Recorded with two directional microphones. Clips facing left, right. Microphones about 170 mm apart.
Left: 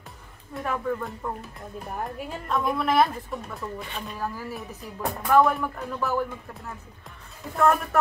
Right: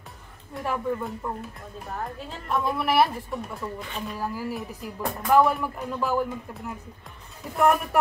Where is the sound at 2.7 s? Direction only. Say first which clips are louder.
Even; 10° right (ahead or behind).